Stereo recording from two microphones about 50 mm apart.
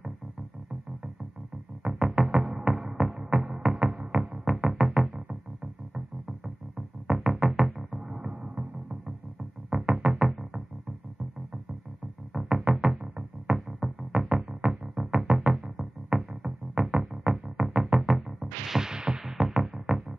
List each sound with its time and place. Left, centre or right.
1.9 s music: centre
3.4 s music: centre
4.5 s music: centre
12.4 s music: centre
17.9 s music: centre